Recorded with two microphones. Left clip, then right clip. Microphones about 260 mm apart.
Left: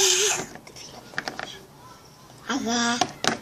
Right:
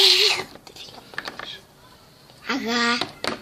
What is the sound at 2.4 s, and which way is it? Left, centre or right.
Speech, right.